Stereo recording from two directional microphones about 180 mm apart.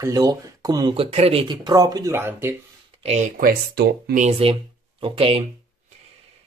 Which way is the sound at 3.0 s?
40° right (ahead or behind).